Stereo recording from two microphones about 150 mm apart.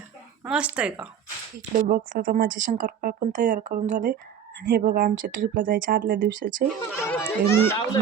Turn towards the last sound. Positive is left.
turn(degrees=15)  # may be behind; listen again after turning